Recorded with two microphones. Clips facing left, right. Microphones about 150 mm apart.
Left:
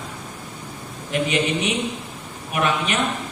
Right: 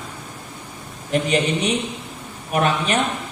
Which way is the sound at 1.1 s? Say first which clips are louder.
Right 2 dB; 40° right (ahead or behind).